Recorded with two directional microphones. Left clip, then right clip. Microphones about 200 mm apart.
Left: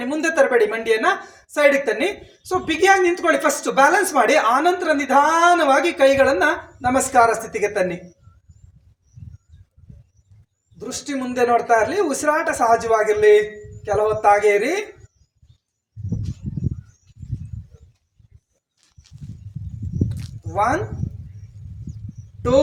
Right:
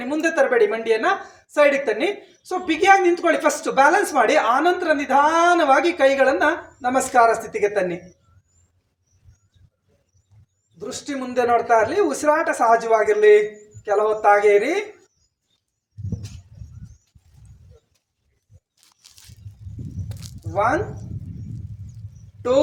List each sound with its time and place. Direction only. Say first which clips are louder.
0.0 s a woman's voice: left 2 dB; 20° left (ahead or behind)
10.8 s a woman's voice: left 1 dB; 20° left (ahead or behind)
18.8 s a sound: right 4 dB; 50° right (ahead or behind)
20.1 s walk: left 3 dB; 35° right (ahead or behind)
20.5 s speech: left 1 dB; 20° left (ahead or behind)